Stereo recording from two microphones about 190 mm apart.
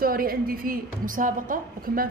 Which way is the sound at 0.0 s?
50° right (ahead or behind).